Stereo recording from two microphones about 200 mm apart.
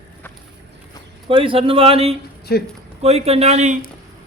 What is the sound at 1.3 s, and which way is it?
Speech, 25° right (ahead or behind).